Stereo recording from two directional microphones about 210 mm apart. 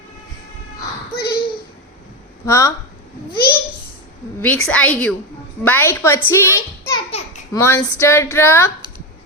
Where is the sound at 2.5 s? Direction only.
15° left (ahead or behind).